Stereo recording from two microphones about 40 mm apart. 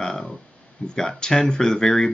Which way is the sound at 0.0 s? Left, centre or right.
Centre.